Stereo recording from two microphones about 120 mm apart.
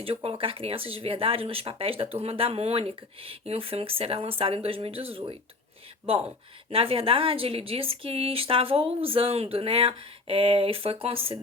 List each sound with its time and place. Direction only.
0.0 s speech: 50° right (ahead or behind)